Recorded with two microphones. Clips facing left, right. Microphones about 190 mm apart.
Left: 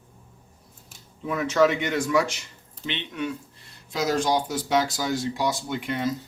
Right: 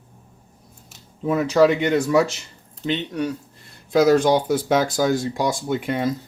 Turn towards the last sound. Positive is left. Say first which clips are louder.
# right 5 dB
turn(degrees=-50)  # may be behind; listen again after turning